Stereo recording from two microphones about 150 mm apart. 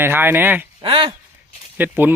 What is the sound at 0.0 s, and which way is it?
Speech, 15° right (ahead or behind).